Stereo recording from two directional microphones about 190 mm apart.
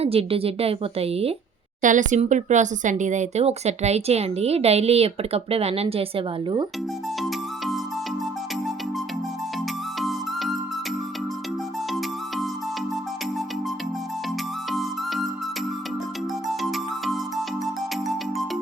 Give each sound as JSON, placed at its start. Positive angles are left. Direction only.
{"t": 0.0, "sound": "speech", "side_deg": -30}
{"t": 7.2, "sound": "music", "side_deg": 0}
{"t": 10.0, "sound": "music", "side_deg": 0}
{"t": 14.7, "sound": "music", "side_deg": 0}
{"t": 16.5, "sound": "music", "side_deg": 0}